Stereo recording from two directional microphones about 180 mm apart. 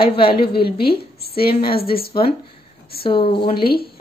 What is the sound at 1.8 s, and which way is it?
Speech, 55° left (ahead or behind).